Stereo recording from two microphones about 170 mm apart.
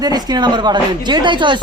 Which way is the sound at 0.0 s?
25° right (ahead or behind).